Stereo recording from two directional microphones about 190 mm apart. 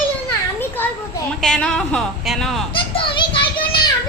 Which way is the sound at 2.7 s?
25° left (ahead or behind).